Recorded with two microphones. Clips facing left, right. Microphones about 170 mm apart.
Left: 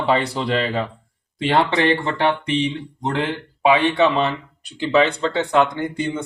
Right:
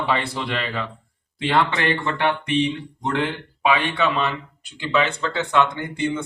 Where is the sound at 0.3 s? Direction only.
35° left (ahead or behind).